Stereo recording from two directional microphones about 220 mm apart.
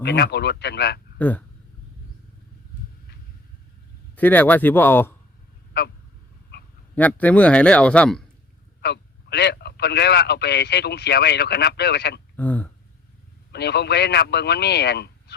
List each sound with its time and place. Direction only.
0.0 s a man's voice: 50° left (ahead or behind)
1.2 s speech: 10° left (ahead or behind)
4.1 s speech: 5° left (ahead or behind)
6.5 s dog: 50° left (ahead or behind)
6.9 s speech: 5° left (ahead or behind)
8.8 s a man's voice: 50° left (ahead or behind)
12.4 s speech: 5° left (ahead or behind)
13.5 s a man's voice: 50° left (ahead or behind)